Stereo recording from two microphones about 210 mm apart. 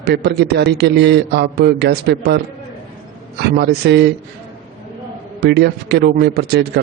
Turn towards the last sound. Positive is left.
turn(degrees=-50)  # may be behind; listen again after turning